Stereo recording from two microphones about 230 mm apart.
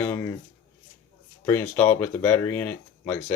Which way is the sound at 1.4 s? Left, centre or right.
Centre.